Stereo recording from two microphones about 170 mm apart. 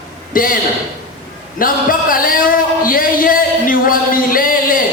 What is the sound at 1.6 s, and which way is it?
A man's voice, 55° left (ahead or behind).